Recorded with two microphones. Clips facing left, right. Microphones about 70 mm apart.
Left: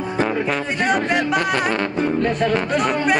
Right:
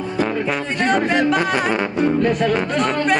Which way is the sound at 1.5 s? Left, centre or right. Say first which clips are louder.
Right 1 dB; centre.